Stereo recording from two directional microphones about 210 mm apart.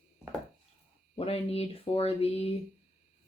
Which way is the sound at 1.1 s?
30° left (ahead or behind).